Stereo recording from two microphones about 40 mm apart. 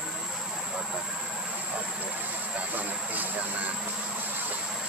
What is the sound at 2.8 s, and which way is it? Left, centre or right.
Vehicle, right.